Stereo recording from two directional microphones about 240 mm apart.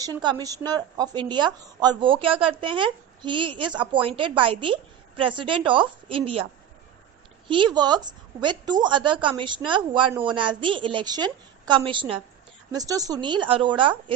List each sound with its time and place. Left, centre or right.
0.0 s a woman's voice: centre
7.4 s a woman's voice: centre